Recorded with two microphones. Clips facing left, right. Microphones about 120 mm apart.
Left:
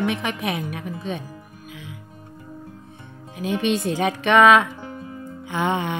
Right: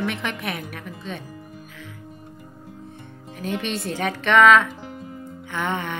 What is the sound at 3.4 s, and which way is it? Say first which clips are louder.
A woman's voice: left 5 dB; 15° left (ahead or behind).